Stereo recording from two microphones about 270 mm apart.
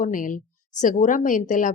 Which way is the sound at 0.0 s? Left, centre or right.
Left.